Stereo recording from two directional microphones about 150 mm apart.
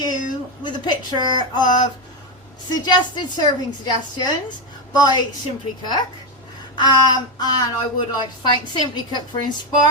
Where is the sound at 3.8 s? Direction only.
30° left (ahead or behind).